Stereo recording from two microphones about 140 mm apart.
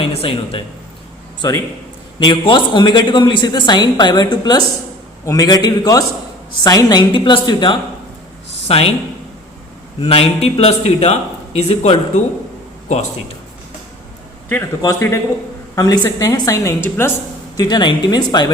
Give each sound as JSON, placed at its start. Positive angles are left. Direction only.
{"t": 0.0, "sound": "speech", "side_deg": 40}
{"t": 1.4, "sound": "a man's voice", "side_deg": 25}
{"t": 8.6, "sound": "speech", "side_deg": 45}
{"t": 10.0, "sound": "speech", "side_deg": 45}
{"t": 14.8, "sound": "a woman's voice", "side_deg": 20}
{"t": 17.6, "sound": "a woman's voice", "side_deg": 30}